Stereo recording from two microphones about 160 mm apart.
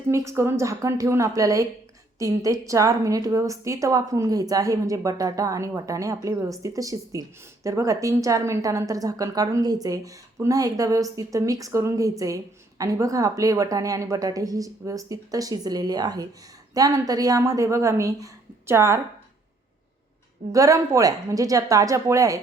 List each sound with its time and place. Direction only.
0.1 s a woman's voice: 15° right (ahead or behind)
20.5 s a woman's voice: 20° right (ahead or behind)